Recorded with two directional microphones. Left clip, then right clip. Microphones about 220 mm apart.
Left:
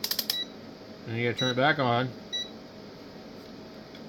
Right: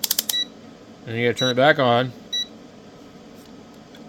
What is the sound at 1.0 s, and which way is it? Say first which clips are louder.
Speech: right 8 dB; 45° right (ahead or behind).